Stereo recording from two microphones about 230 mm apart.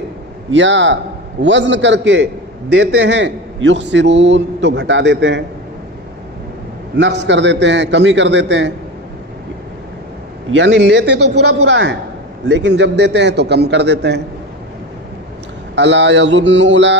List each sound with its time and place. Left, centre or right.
0.5 s a man's voice: right
7.0 s a man's voice: right
10.5 s a man's voice: right
15.7 s a man's voice: right